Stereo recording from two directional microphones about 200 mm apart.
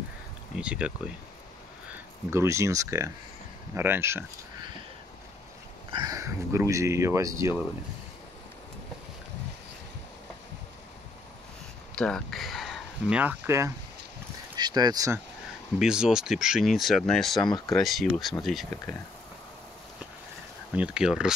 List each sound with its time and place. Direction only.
0.6 s speech: 5° right (ahead or behind)
2.3 s speech: 15° right (ahead or behind)
5.9 s speech: 20° right (ahead or behind)
11.9 s speech: 5° left (ahead or behind); by 15.1 s 20° right (ahead or behind)
15.8 s speech: 5° right (ahead or behind)
20.7 s speech: 5° right (ahead or behind)